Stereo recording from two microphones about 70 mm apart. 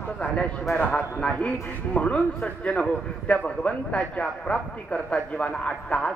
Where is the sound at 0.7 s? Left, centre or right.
Centre.